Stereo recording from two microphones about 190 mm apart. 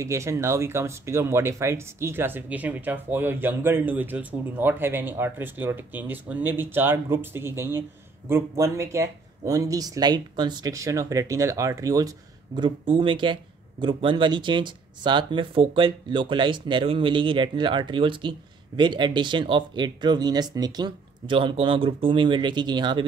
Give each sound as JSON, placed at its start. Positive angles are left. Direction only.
{"t": 0.0, "sound": "speech", "side_deg": -15}